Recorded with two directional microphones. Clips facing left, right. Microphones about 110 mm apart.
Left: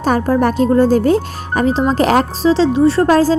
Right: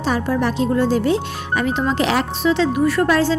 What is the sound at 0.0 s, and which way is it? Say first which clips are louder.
A woman's voice: left 5 dB; 45° left (ahead or behind).